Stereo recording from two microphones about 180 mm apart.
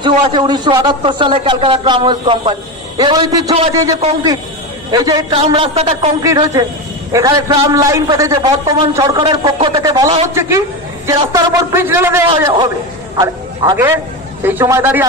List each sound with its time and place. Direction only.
0.0 s a man's voice: 25° right (ahead or behind)
5.3 s a man's voice: 30° right (ahead or behind)
6.2 s a man's voice: 20° right (ahead or behind)
14.4 s a man's voice: 10° right (ahead or behind)